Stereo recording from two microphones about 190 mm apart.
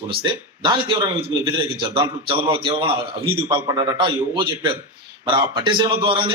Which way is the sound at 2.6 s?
25° right (ahead or behind).